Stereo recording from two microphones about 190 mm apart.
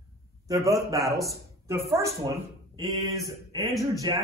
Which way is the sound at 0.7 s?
15° right (ahead or behind).